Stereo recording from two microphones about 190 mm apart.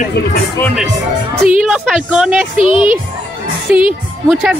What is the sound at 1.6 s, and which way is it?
Speech, 5° right (ahead or behind).